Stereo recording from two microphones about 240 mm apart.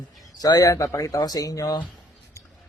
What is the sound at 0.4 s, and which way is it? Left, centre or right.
Speech, centre.